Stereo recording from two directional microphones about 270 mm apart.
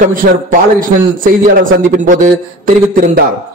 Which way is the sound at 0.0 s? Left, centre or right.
Right.